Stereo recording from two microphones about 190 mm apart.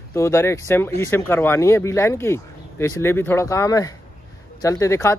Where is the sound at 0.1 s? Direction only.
15° left (ahead or behind).